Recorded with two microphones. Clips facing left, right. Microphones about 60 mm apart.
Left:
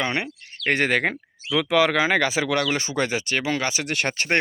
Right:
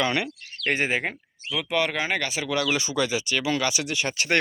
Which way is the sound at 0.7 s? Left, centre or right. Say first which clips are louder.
Left 4 dB; left.